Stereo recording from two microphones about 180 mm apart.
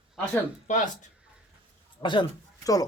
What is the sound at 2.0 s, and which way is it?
Speech, 25° left (ahead or behind).